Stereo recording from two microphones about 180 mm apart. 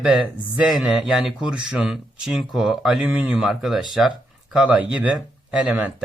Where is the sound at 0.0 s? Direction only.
5° right (ahead or behind).